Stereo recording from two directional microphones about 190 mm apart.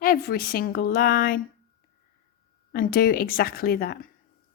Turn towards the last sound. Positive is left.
turn(degrees=50)  # may be behind; listen again after turning